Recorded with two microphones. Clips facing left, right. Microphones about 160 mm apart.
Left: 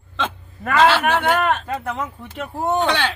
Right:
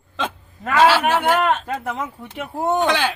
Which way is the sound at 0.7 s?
5° right (ahead or behind).